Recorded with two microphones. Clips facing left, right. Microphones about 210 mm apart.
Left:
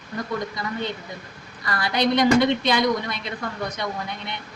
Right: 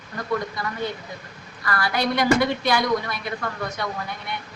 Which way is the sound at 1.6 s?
20° left (ahead or behind).